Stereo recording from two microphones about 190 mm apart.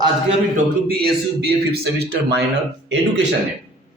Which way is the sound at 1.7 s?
60° right (ahead or behind).